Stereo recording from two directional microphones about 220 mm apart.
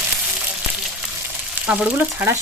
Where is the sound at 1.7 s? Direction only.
5° right (ahead or behind).